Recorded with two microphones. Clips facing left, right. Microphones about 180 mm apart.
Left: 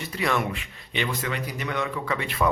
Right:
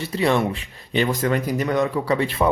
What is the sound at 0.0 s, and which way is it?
Speech, 30° right (ahead or behind).